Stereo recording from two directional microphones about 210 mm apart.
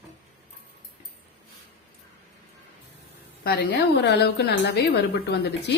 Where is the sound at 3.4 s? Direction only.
50° left (ahead or behind).